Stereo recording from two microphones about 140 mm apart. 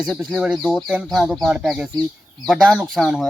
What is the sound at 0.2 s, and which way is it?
Speech, 5° right (ahead or behind).